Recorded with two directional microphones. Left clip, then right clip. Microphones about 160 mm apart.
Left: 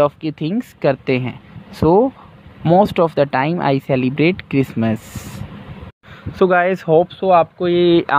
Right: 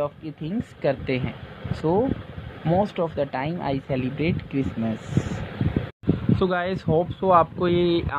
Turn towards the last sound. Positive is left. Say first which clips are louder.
# left 7 dB
turn(degrees=25)  # may be behind; listen again after turning